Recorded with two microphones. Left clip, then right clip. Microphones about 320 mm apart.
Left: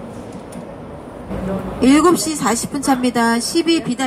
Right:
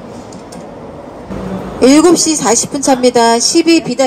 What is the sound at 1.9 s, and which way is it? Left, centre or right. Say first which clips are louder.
A woman's voice: right 4 dB; right.